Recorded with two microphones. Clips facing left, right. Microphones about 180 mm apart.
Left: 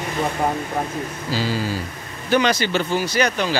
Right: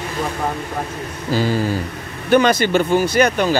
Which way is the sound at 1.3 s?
50° right (ahead or behind).